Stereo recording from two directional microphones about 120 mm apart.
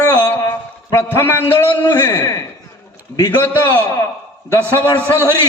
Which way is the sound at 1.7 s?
40° left (ahead or behind).